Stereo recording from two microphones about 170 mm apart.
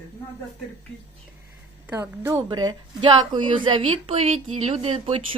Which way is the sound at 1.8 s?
15° right (ahead or behind).